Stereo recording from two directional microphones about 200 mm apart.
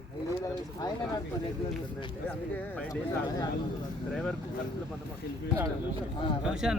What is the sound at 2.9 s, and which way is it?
Speech, 20° left (ahead or behind).